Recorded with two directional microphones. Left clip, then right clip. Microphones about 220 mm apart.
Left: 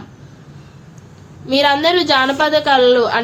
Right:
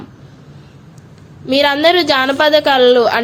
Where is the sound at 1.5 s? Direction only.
25° right (ahead or behind).